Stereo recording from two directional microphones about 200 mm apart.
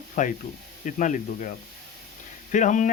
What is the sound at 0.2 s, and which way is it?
Speech, 40° left (ahead or behind).